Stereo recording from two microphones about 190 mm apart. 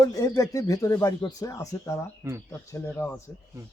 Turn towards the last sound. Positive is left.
turn(degrees=10)  # may be behind; listen again after turning